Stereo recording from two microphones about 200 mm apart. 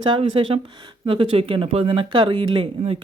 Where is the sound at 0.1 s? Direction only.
25° right (ahead or behind).